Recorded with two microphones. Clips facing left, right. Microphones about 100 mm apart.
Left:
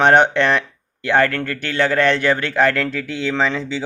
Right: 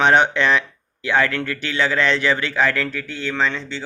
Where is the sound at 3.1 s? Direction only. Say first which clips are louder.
Left 3 dB; 90° left.